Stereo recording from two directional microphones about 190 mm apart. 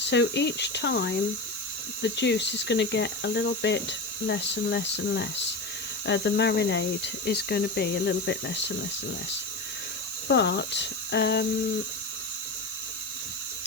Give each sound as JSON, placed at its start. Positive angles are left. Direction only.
{"t": 0.1, "sound": "speech", "side_deg": 65}
{"t": 10.2, "sound": "speech", "side_deg": 65}